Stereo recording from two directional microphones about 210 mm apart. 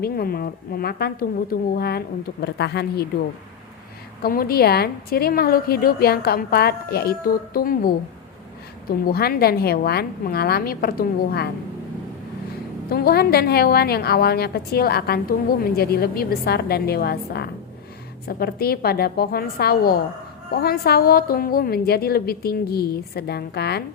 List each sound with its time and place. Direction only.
0.0 s a woman's voice: 45° left (ahead or behind)
4.2 s a woman's voice: 45° left (ahead or behind)
12.9 s a woman's voice: 45° left (ahead or behind)